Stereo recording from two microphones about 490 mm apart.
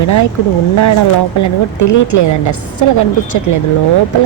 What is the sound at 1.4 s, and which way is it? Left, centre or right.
A woman's voice, left.